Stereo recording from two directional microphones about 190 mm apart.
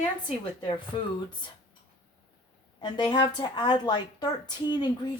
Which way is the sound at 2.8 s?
25° left (ahead or behind).